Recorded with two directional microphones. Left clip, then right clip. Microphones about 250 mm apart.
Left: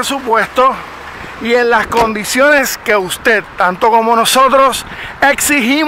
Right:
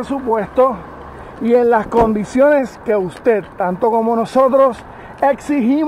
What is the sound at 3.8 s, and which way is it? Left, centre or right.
Speech, left.